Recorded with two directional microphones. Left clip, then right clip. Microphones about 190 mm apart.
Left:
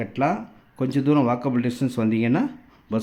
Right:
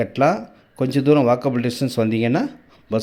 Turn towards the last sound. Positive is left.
turn(degrees=-5)  # may be behind; listen again after turning